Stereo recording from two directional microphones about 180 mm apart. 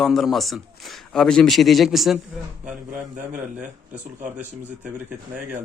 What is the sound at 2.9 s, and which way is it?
Speech, 45° right (ahead or behind).